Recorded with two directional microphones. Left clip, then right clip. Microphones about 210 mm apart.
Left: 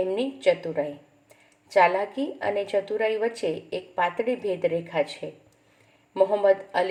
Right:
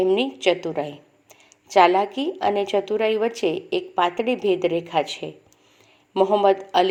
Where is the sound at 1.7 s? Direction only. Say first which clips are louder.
Right 4 dB; 25° right (ahead or behind).